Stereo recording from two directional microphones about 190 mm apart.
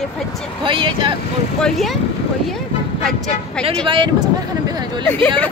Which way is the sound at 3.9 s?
25° right (ahead or behind).